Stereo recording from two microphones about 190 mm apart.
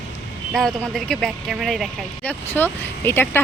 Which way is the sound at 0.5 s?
Centre (ahead or behind).